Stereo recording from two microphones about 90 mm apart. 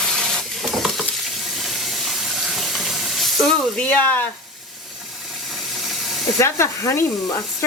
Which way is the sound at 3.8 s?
20° left (ahead or behind).